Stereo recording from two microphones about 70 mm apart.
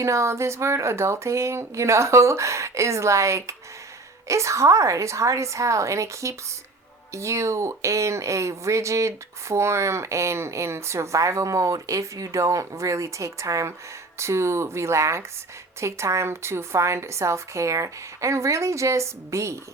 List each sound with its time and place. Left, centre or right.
0.0 s speech: right